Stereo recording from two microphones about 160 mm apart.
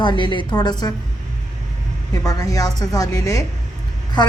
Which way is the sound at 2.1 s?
20° left (ahead or behind).